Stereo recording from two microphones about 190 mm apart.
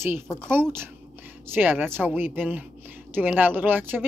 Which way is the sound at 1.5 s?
10° right (ahead or behind).